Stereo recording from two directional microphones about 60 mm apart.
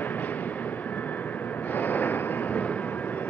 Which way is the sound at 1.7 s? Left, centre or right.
Left.